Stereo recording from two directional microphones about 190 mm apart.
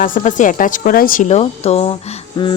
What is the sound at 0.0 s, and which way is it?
Speech, 45° left (ahead or behind).